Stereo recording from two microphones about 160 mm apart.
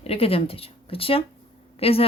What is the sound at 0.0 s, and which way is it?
Speech, 40° left (ahead or behind).